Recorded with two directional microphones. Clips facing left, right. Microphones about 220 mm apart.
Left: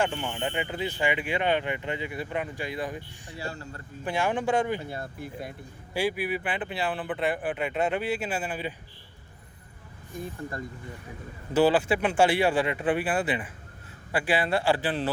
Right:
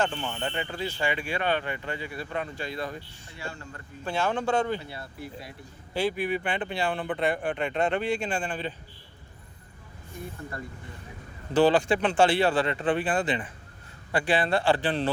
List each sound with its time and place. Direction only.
0.0 s speech: 10° left (ahead or behind)
3.3 s speech: 35° left (ahead or behind)
4.0 s speech: 15° left (ahead or behind)
4.8 s speech: 45° left (ahead or behind)
5.9 s speech: 10° left (ahead or behind)
11.5 s speech: 5° left (ahead or behind)